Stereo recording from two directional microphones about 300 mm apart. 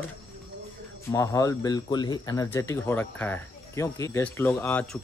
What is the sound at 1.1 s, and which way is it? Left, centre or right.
Speech, centre.